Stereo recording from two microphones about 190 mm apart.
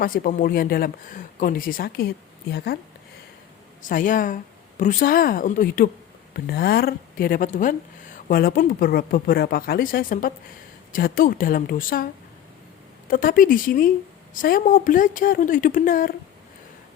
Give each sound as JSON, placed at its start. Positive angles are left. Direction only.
{"t": 0.0, "sound": "speech", "side_deg": 45}
{"t": 3.8, "sound": "speech", "side_deg": 45}
{"t": 13.1, "sound": "speech", "side_deg": 45}